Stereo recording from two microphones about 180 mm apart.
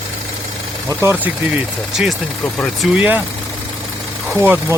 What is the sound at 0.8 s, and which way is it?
Speech, 15° right (ahead or behind).